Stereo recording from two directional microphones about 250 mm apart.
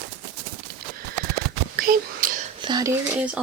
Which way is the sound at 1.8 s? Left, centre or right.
Right.